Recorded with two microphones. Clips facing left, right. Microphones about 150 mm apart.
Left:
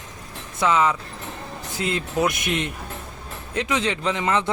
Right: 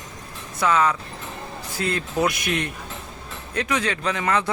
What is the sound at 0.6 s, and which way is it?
Speech, 20° left (ahead or behind).